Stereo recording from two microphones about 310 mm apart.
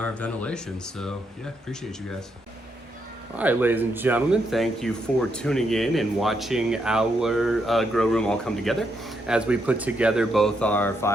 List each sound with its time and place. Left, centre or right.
0.0 s speech: centre
3.3 s speech: centre